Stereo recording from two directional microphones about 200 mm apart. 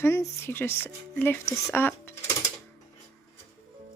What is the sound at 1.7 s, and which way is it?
Music, 10° left (ahead or behind).